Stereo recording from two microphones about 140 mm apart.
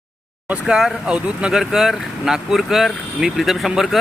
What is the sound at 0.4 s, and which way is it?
Speech, 5° right (ahead or behind).